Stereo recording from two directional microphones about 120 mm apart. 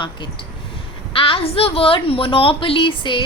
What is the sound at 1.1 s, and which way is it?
A woman's voice, 50° left (ahead or behind).